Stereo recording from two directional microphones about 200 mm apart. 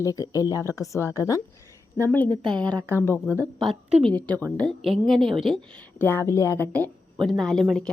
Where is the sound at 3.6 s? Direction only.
Centre (ahead or behind).